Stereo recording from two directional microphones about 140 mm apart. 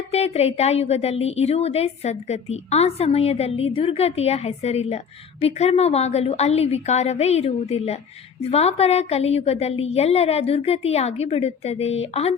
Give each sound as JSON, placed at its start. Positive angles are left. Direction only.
{"t": 0.1, "sound": "a woman's voice", "side_deg": 50}